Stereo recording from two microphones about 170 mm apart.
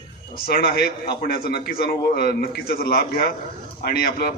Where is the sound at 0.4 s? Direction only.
65° left (ahead or behind).